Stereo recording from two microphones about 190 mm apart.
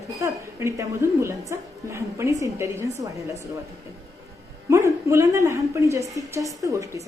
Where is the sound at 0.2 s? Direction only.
15° right (ahead or behind).